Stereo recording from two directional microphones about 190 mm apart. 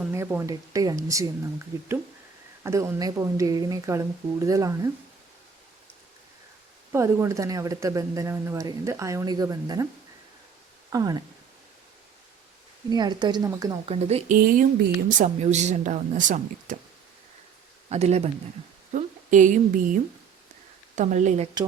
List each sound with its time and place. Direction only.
0.1 s a woman's voice: 15° right (ahead or behind)
6.9 s a woman's voice: 15° right (ahead or behind)
10.9 s a woman's voice: 20° right (ahead or behind)
12.9 s a woman's voice: 20° right (ahead or behind)
13.8 s speech: 30° right (ahead or behind)
14.3 s speech: 50° right (ahead or behind)
15.2 s speech: 35° right (ahead or behind)
17.8 s a woman's voice: 35° right (ahead or behind)